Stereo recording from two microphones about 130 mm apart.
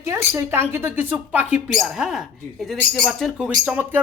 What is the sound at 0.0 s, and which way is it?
A man's voice, 20° right (ahead or behind).